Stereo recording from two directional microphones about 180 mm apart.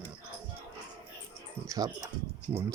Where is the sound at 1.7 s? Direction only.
20° right (ahead or behind).